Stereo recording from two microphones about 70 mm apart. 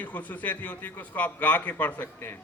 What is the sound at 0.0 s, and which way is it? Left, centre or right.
A man's voice, left.